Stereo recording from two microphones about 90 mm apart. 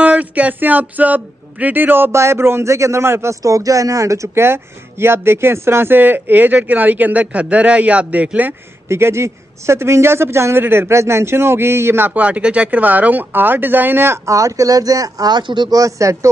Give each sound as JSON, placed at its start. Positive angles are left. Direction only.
{"t": 0.0, "sound": "speech", "side_deg": -15}
{"t": 8.8, "sound": "speech", "side_deg": -30}
{"t": 15.7, "sound": "speech", "side_deg": -40}